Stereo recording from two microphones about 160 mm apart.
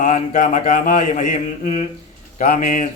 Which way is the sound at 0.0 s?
55° left (ahead or behind).